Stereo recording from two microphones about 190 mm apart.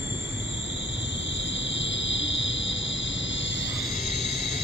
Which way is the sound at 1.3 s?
75° left (ahead or behind).